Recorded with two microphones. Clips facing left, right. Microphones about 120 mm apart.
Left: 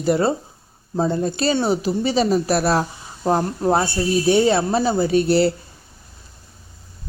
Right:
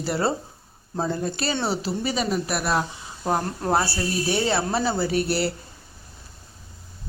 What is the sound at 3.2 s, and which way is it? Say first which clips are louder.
Speech: left 6 dB; 20° left (ahead or behind).